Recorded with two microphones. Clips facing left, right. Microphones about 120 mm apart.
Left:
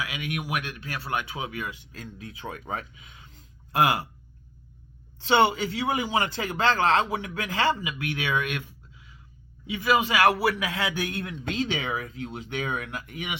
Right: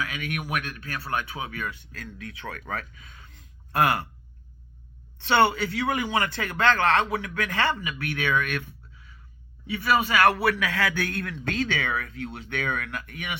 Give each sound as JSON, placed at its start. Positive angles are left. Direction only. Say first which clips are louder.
{"t": 0.5, "sound": "a man's voice", "louder": "even", "side_deg": 25}
{"t": 5.2, "sound": "a man's voice", "louder": "even", "side_deg": 25}